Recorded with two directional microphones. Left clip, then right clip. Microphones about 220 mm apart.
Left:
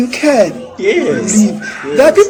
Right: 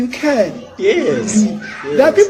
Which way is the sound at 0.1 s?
35° left (ahead or behind).